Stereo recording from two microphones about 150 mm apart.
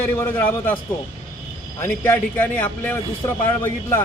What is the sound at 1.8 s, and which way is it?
A man's voice, 10° left (ahead or behind).